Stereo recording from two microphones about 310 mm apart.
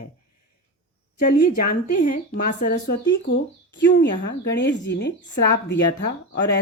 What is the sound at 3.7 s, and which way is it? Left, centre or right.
Speech, left.